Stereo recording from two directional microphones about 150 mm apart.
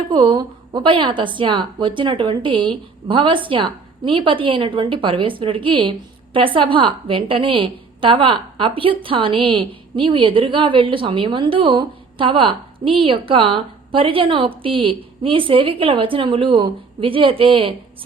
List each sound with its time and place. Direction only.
0.1 s a woman's voice: 35° right (ahead or behind)